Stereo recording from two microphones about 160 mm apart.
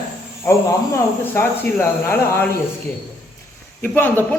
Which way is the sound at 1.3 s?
15° left (ahead or behind).